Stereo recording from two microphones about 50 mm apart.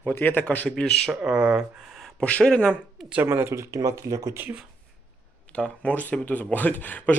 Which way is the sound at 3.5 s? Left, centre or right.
Right.